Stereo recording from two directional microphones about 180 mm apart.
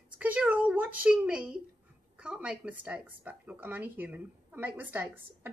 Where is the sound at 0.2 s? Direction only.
10° right (ahead or behind).